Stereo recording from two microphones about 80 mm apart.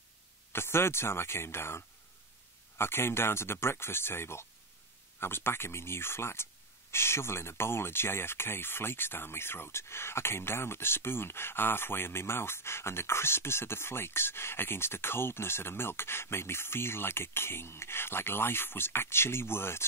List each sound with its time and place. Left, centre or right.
0.5 s speech: left